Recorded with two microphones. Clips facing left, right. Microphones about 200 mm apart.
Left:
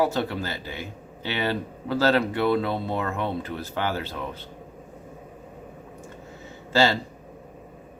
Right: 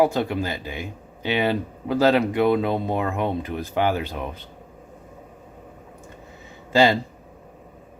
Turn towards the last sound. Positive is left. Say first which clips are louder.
# right 4 dB
turn(degrees=-15)  # may be behind; listen again after turning